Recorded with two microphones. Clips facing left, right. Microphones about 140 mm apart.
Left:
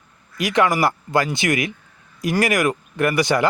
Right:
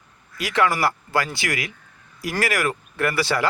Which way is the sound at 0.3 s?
20° left (ahead or behind).